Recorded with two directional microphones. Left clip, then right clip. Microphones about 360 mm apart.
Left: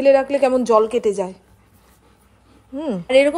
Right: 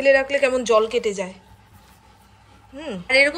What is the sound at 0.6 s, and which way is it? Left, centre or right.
Speech, left.